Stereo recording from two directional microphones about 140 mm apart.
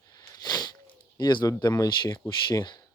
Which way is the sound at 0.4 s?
30° left (ahead or behind).